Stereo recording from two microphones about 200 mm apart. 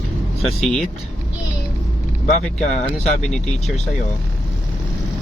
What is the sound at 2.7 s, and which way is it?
Speech, 35° left (ahead or behind).